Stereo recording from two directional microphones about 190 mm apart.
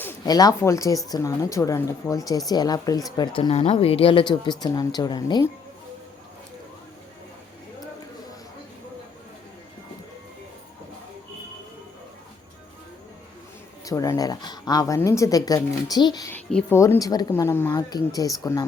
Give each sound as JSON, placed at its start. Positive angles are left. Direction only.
{"t": 0.0, "sound": "a woman's voice", "side_deg": 15}
{"t": 3.5, "sound": "speech", "side_deg": 35}
{"t": 13.8, "sound": "speech", "side_deg": 15}
{"t": 16.3, "sound": "a woman's voice", "side_deg": 5}